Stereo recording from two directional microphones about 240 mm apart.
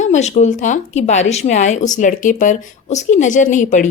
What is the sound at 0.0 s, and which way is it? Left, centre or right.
Speech, left.